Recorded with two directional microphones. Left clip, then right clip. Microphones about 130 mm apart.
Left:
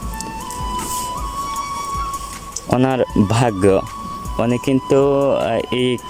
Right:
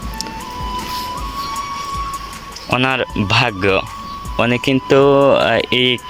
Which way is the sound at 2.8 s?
50° left (ahead or behind).